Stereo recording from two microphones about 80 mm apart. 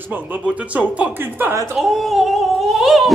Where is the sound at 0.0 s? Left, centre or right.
Right.